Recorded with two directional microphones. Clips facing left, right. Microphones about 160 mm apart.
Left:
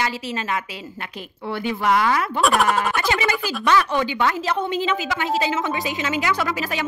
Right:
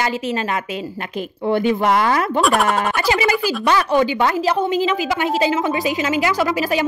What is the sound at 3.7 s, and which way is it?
Speech, 40° right (ahead or behind).